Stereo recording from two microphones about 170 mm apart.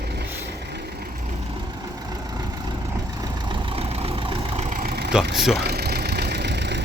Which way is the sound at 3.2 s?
25° right (ahead or behind).